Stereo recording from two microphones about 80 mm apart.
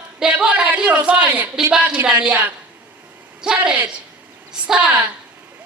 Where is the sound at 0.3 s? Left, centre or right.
Centre.